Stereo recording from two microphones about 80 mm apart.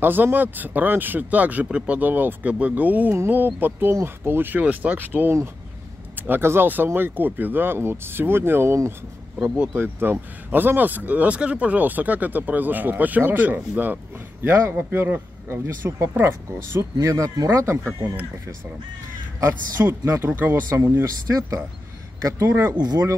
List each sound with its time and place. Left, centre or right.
0.0 s a man's voice: right
16.9 s speech: right
19.4 s a man's voice: right
21.0 s speech: right
22.8 s speech: right